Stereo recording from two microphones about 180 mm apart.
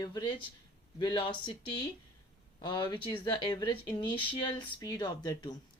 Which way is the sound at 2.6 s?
25° left (ahead or behind).